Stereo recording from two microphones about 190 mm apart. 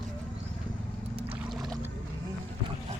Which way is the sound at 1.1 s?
30° right (ahead or behind).